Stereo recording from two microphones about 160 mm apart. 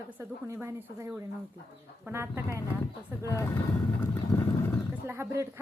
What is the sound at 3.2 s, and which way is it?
Speech, 20° left (ahead or behind).